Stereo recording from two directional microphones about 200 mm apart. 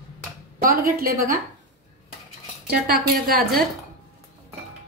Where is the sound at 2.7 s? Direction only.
50° right (ahead or behind).